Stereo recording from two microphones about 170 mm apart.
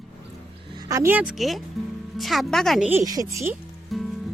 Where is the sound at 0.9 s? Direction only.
15° right (ahead or behind); by 2.8 s centre (ahead or behind).